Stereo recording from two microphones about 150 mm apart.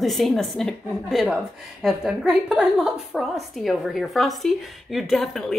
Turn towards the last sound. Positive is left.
turn(degrees=0)  # may be behind; listen again after turning